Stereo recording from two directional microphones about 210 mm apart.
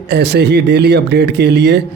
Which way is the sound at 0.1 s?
55° right (ahead or behind).